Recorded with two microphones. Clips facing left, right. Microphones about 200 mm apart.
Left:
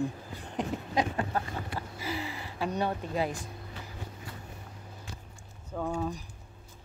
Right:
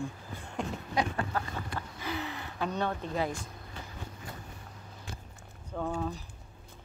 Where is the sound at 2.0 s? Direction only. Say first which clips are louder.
Even; 5° left (ahead or behind).